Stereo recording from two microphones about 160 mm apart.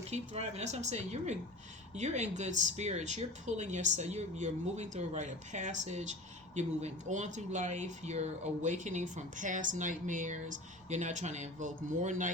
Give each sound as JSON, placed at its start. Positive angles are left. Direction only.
{"t": 0.1, "sound": "speech", "side_deg": -45}